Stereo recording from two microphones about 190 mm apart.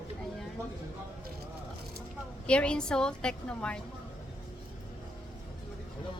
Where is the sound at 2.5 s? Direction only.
5° left (ahead or behind).